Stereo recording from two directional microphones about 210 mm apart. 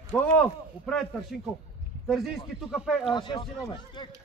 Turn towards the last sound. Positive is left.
turn(degrees=20)  # may be behind; listen again after turning